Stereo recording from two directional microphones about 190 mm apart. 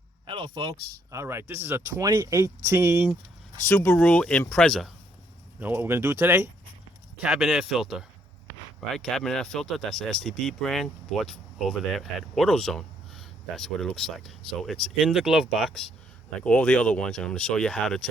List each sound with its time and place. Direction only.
0.3 s speech: 25° right (ahead or behind)
3.6 s speech: 10° left (ahead or behind)
5.5 s speech: 10° right (ahead or behind)